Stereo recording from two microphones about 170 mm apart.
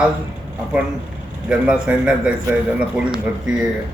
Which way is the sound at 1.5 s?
5° right (ahead or behind).